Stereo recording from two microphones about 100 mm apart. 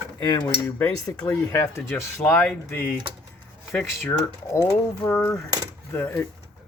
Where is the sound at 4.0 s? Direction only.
25° left (ahead or behind).